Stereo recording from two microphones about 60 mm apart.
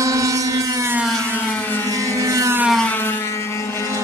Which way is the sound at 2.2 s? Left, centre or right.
Right.